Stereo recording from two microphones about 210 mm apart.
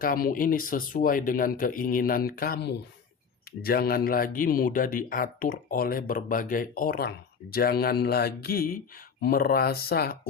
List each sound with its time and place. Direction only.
0.0 s speech: 45° left (ahead or behind)